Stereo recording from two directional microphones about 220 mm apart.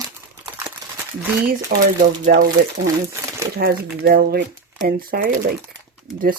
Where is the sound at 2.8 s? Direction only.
15° right (ahead or behind).